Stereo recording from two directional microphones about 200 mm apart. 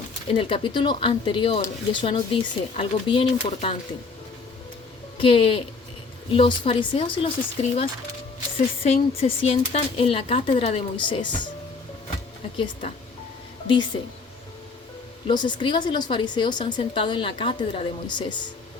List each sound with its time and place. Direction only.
0.3 s speech: 25° left (ahead or behind)
5.1 s speech: 25° left (ahead or behind)
13.7 s speech: 25° left (ahead or behind)
15.3 s speech: 25° left (ahead or behind)